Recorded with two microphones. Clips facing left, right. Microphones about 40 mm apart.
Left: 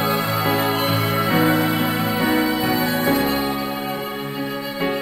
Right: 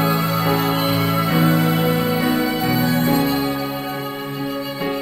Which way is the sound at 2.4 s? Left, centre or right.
Centre.